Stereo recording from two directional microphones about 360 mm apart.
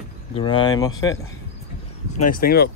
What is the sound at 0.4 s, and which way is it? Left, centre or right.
Speech, centre.